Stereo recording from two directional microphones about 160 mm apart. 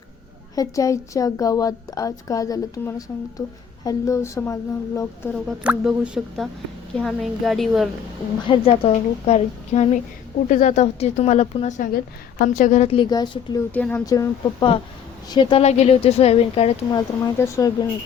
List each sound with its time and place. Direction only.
0.5 s a woman's voice: 20° left (ahead or behind)
5.3 s a woman's voice: 5° right (ahead or behind)
8.4 s a woman's voice: 35° left (ahead or behind)
12.4 s a woman's voice: 55° left (ahead or behind)
13.1 s a woman's voice: 25° left (ahead or behind)
13.7 s speech: 10° left (ahead or behind)
14.0 s a woman's voice: 20° left (ahead or behind); by 16.7 s 40° left (ahead or behind)
16.9 s a woman's voice: 25° left (ahead or behind)